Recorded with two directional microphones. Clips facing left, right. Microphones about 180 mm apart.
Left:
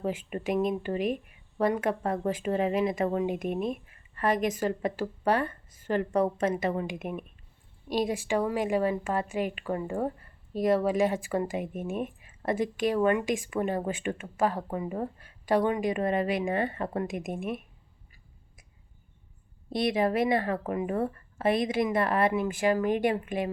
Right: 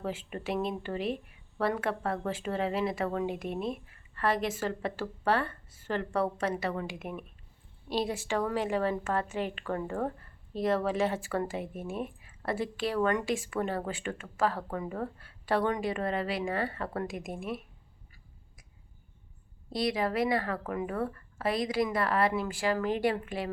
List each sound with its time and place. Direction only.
0.0 s a woman's voice: 15° left (ahead or behind)
19.7 s speech: 20° left (ahead or behind)